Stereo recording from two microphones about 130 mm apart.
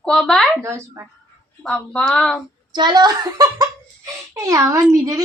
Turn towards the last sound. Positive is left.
turn(degrees=-25)  # may be behind; listen again after turning